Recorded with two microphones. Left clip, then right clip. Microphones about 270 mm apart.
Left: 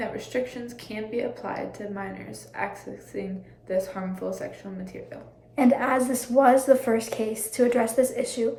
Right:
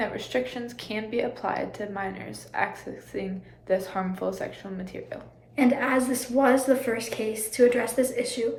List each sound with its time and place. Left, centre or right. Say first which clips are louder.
0.0 s a woman's voice: right 1 dB; centre
3.1 s a woman's voice: right 1 dB; centre
5.5 s a woman's voice: left 2 dB; centre